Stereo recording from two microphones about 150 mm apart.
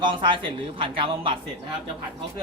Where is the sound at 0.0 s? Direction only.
30° right (ahead or behind).